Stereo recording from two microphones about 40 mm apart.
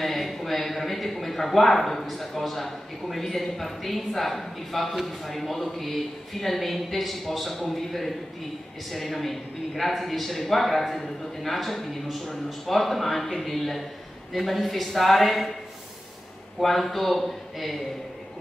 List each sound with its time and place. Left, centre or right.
0.0 s a man's voice: centre
16.5 s a man's voice: centre